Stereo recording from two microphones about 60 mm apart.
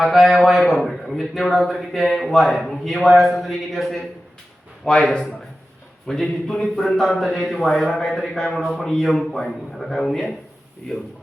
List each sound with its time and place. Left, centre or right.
0.0 s speech: centre
4.9 s speech: centre